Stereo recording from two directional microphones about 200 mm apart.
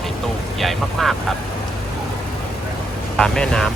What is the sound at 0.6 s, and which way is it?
Speech, centre (ahead or behind).